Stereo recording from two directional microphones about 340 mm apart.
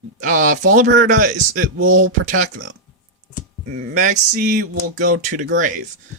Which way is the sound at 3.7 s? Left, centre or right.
Right.